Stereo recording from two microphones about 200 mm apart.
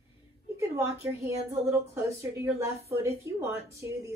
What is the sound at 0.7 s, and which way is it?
Speech, 15° right (ahead or behind).